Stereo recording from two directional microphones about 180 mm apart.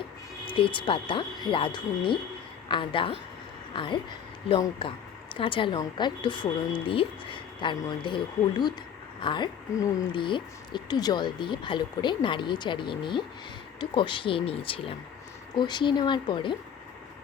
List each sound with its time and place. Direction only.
0.4 s a woman's voice: 30° left (ahead or behind)